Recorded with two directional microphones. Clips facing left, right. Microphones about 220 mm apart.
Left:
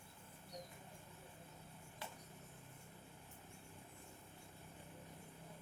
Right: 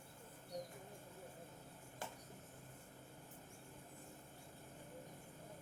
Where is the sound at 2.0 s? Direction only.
45° right (ahead or behind).